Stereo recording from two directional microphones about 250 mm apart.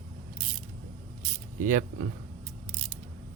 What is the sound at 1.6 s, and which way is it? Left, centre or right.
Speech, right.